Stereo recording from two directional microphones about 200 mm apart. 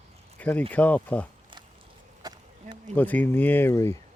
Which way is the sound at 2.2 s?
20° right (ahead or behind).